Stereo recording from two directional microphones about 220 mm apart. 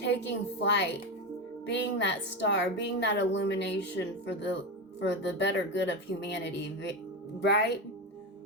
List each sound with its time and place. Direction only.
0.0 s a woman's voice: 50° left (ahead or behind)